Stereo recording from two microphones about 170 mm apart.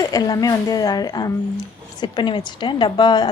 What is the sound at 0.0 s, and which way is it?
A woman's voice, 20° left (ahead or behind).